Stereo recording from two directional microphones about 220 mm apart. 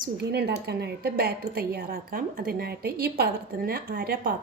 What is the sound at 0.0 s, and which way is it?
A woman's voice, 45° right (ahead or behind).